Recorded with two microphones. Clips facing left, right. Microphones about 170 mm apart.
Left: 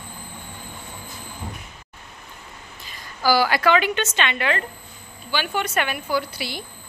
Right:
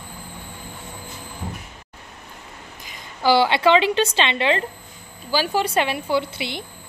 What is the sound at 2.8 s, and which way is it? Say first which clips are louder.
A woman's voice: right 2 dB; 20° right (ahead or behind).